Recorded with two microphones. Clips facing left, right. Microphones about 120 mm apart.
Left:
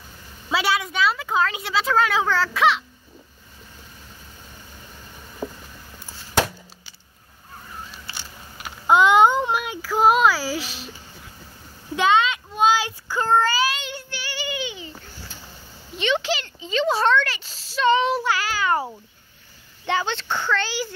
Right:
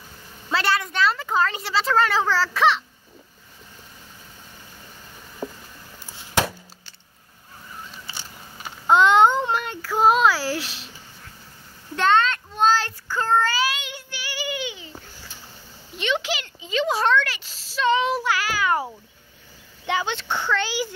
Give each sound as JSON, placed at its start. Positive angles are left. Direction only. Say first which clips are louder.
{"t": 0.5, "sound": "a woman's voice", "louder": "even", "side_deg": 5}
{"t": 5.4, "sound": "a sound", "louder": "left 1 dB", "side_deg": 10}
{"t": 8.1, "sound": "a sound", "louder": "even", "side_deg": 5}
{"t": 11.9, "sound": "child singing", "louder": "even", "side_deg": 10}
{"t": 16.0, "sound": "a child's voice", "louder": "left 2 dB", "side_deg": -5}
{"t": 19.9, "sound": "speech", "louder": "left 1 dB", "side_deg": -10}